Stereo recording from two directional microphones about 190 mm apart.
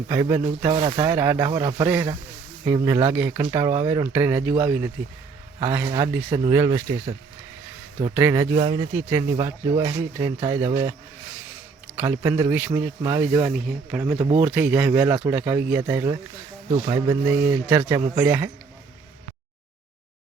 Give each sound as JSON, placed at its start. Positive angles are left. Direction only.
{"t": 0.1, "sound": "a man's voice", "side_deg": -15}
{"t": 1.0, "sound": "a man's voice", "side_deg": -15}
{"t": 8.1, "sound": "a man's voice", "side_deg": -15}
{"t": 11.9, "sound": "a man's voice", "side_deg": -10}